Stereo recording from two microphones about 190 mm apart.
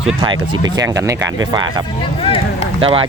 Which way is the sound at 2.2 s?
30° left (ahead or behind).